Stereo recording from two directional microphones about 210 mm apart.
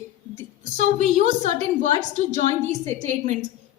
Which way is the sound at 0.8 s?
35° right (ahead or behind).